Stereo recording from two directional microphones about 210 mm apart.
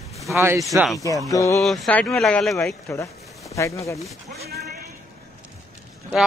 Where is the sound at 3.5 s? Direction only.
15° left (ahead or behind).